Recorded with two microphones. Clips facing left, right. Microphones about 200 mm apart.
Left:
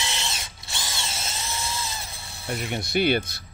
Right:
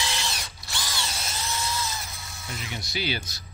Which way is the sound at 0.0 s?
25° left (ahead or behind).